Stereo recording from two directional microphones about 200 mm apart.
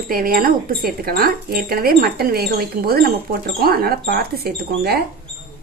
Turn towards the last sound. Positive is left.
turn(degrees=-50)  # may be behind; listen again after turning